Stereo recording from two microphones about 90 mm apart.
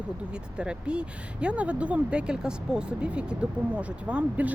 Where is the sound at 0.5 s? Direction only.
10° right (ahead or behind).